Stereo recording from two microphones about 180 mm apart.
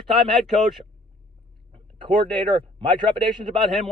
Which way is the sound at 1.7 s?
25° right (ahead or behind).